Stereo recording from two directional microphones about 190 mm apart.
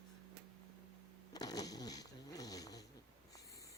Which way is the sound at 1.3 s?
20° left (ahead or behind).